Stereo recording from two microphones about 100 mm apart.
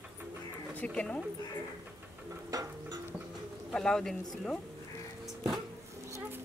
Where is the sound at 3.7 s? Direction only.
5° left (ahead or behind).